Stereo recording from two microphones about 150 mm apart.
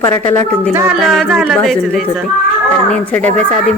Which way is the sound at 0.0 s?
15° left (ahead or behind).